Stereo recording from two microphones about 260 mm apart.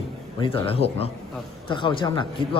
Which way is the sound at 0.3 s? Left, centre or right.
Left.